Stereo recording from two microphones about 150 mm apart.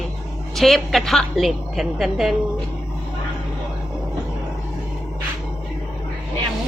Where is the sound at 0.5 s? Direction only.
Centre (ahead or behind).